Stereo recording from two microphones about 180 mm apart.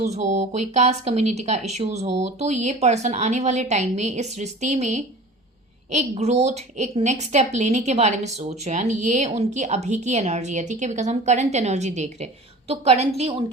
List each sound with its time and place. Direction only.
0.1 s a woman's voice: 40° right (ahead or behind)